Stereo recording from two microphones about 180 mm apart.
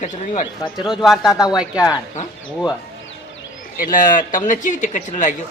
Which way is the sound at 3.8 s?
50° left (ahead or behind).